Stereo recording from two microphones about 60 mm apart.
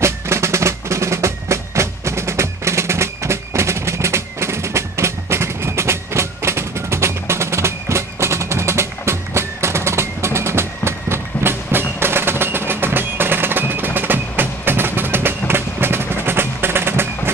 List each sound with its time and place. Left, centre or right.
0.0 s percussion: right
12.0 s music: right